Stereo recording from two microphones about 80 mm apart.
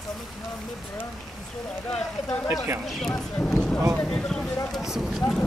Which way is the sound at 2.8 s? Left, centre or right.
Centre.